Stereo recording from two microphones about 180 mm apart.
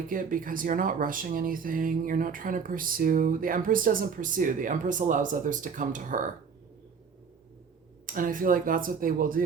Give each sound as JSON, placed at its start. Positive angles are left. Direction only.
{"t": 0.1, "sound": "speech", "side_deg": -50}
{"t": 8.0, "sound": "speech", "side_deg": -50}